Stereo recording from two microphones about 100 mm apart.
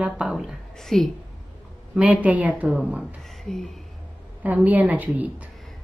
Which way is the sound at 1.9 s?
10° right (ahead or behind).